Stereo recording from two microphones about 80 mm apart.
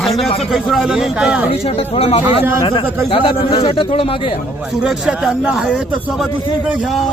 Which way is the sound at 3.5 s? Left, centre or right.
Left.